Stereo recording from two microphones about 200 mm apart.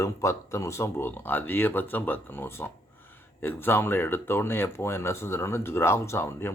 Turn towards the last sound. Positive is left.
turn(degrees=10)  # may be behind; listen again after turning